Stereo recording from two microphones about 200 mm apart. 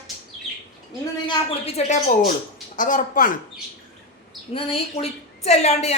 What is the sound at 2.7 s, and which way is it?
Speech, 40° left (ahead or behind).